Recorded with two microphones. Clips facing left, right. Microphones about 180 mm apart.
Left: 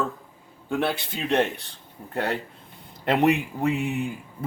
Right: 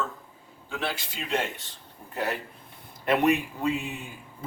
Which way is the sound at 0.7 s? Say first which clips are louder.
Left 7 dB; 55° left (ahead or behind).